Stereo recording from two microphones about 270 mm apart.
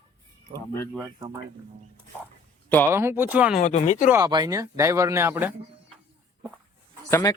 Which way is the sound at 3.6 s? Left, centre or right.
Left.